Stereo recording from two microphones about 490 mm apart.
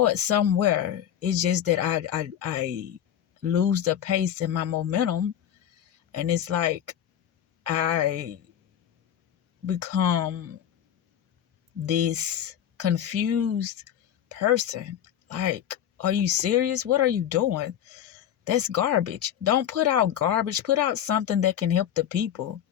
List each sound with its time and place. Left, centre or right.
0.0 s speech: right
9.6 s speech: right
11.9 s speech: right